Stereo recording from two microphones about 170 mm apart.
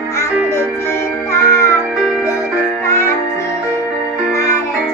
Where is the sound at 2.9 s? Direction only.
15° left (ahead or behind).